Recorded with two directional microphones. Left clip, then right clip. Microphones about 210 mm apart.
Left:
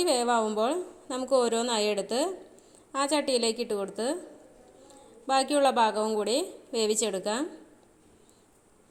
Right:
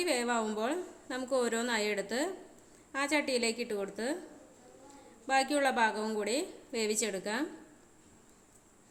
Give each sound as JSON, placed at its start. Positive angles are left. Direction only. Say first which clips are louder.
{"t": 0.0, "sound": "a woman's voice", "louder": "left 6 dB", "side_deg": 15}
{"t": 1.7, "sound": "a woman's voice", "louder": "left 5 dB", "side_deg": -10}
{"t": 2.0, "sound": "a woman's voice", "louder": "left 5 dB", "side_deg": 15}
{"t": 5.2, "sound": "a woman's voice", "louder": "left 5 dB", "side_deg": 15}